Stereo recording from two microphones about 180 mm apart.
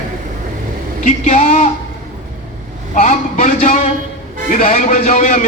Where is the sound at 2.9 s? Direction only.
45° left (ahead or behind).